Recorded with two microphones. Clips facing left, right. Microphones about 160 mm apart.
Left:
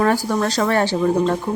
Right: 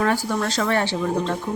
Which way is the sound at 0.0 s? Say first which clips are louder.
Left 4 dB; 40° left (ahead or behind).